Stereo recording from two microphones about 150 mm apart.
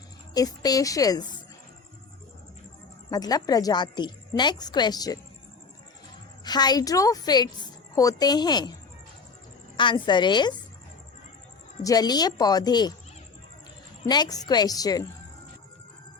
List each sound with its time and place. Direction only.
0.3 s a woman's voice: 25° left (ahead or behind)
3.1 s a woman's voice: 25° left (ahead or behind)
6.4 s a woman's voice: 25° left (ahead or behind)
9.7 s a woman's voice: 30° left (ahead or behind)
11.8 s a woman's voice: 25° left (ahead or behind)
14.0 s a woman's voice: 30° left (ahead or behind)